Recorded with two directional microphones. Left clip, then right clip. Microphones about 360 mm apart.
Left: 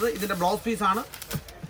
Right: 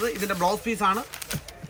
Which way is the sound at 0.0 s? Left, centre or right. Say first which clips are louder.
Even; centre.